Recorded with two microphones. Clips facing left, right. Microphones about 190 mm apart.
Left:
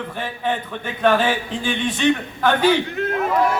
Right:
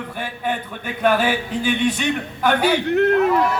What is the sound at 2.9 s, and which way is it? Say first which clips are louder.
Speech: right 8 dB; 65° right (ahead or behind).